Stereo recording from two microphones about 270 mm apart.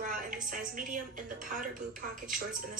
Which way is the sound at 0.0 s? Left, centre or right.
Right.